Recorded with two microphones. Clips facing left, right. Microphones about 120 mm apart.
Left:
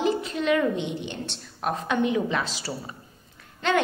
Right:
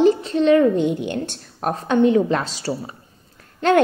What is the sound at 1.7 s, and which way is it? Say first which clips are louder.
A woman's voice: right 8 dB; 35° right (ahead or behind).